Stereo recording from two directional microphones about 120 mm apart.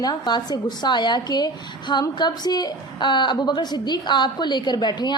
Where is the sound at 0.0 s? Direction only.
40° left (ahead or behind).